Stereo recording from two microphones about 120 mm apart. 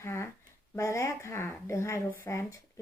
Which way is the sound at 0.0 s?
20° left (ahead or behind).